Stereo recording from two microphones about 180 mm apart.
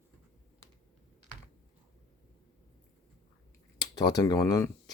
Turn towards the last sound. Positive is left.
turn(degrees=20)  # may be behind; listen again after turning